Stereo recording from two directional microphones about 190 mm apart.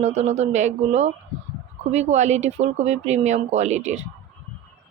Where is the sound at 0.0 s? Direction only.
35° right (ahead or behind).